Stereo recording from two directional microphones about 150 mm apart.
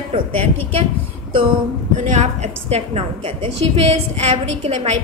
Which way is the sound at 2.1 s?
45° right (ahead or behind).